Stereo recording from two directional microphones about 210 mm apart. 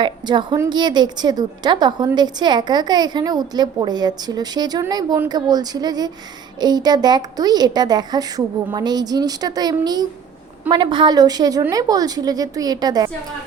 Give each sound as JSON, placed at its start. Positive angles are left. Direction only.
{"t": 0.0, "sound": "a woman's voice", "side_deg": -20}